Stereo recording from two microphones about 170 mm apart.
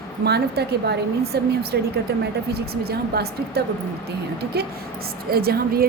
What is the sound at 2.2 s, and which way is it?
A woman's voice, 70° right (ahead or behind).